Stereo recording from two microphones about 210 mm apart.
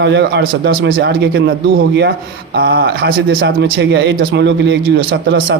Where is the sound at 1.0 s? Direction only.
50° right (ahead or behind).